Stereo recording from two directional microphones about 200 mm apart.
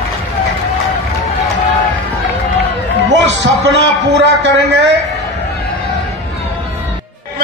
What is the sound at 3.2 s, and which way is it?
A man's voice, 60° right (ahead or behind).